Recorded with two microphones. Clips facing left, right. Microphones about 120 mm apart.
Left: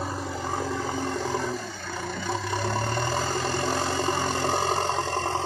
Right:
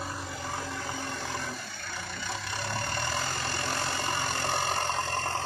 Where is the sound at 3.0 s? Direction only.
35° left (ahead or behind).